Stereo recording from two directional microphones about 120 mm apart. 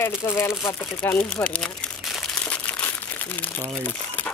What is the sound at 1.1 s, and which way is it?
Speech, 10° left (ahead or behind).